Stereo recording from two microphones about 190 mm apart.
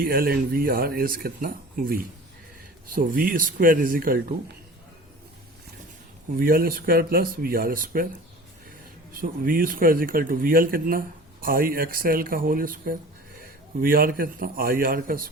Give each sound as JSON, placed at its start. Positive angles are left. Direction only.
{"t": 0.0, "sound": "speech", "side_deg": -50}
{"t": 6.4, "sound": "speech", "side_deg": -50}
{"t": 9.1, "sound": "speech", "side_deg": -45}